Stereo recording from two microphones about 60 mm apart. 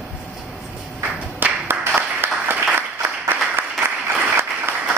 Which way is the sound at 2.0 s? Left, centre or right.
Right.